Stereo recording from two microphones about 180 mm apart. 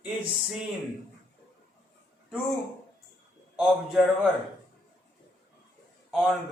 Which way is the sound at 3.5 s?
5° right (ahead or behind).